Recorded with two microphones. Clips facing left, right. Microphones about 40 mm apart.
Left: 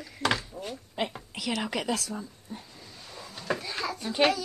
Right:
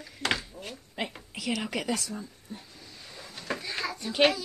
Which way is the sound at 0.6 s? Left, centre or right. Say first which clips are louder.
Left 4 dB; left.